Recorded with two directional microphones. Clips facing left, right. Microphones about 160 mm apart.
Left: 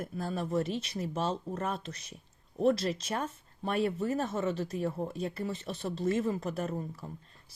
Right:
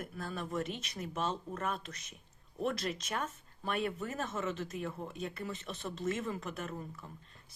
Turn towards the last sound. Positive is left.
turn(degrees=35)  # may be behind; listen again after turning